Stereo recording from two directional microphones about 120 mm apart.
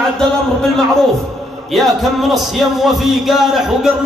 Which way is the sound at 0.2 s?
5° left (ahead or behind).